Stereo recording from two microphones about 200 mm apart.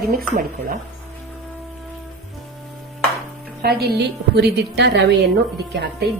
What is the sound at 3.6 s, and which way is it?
A woman's voice, 55° right (ahead or behind).